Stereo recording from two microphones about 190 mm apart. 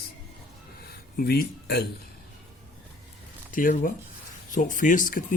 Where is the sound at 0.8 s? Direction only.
50° left (ahead or behind).